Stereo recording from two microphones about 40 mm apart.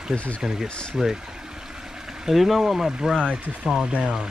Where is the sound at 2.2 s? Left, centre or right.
Centre.